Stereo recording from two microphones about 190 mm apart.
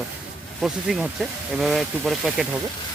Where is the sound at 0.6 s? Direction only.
Centre (ahead or behind).